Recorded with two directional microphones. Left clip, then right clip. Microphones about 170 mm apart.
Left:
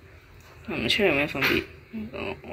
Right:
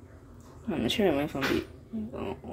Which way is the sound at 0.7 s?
30° right (ahead or behind).